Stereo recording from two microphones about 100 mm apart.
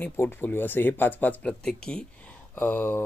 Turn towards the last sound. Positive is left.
turn(degrees=20)  # may be behind; listen again after turning